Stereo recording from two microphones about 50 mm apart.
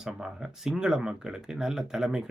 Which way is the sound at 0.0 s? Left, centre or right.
Centre.